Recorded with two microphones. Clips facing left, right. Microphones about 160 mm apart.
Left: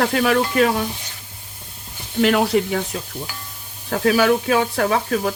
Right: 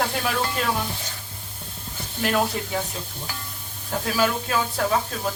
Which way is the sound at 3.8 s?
70° left (ahead or behind).